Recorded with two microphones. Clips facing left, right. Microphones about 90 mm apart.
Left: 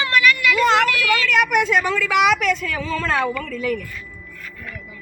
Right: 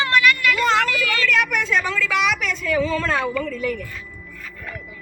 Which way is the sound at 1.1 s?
15° left (ahead or behind).